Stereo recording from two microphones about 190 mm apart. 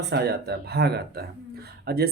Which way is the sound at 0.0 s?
60° right (ahead or behind).